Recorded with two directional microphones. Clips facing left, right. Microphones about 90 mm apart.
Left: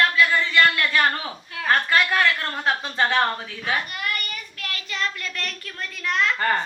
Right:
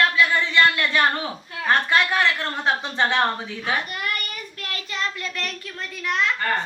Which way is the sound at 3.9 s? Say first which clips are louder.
Even; 35° right (ahead or behind).